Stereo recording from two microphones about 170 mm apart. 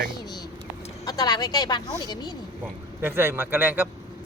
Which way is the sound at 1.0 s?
20° left (ahead or behind).